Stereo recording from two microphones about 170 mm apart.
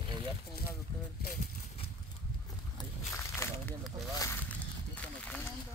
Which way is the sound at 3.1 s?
15° left (ahead or behind).